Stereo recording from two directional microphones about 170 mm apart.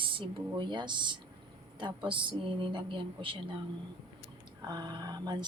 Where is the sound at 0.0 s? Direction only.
30° right (ahead or behind).